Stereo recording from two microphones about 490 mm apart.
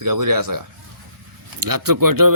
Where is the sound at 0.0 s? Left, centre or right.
Right.